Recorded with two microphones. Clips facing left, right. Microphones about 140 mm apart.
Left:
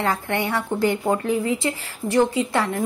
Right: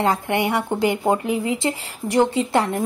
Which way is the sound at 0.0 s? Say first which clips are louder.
Right 3 dB; 15° right (ahead or behind).